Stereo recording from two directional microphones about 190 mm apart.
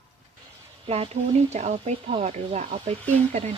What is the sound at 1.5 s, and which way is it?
Speech, 35° right (ahead or behind).